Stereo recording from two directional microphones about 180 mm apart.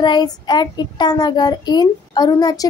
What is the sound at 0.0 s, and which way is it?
Child singing, 25° left (ahead or behind).